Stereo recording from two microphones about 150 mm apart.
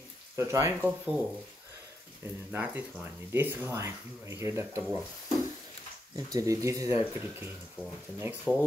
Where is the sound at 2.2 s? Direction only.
15° right (ahead or behind).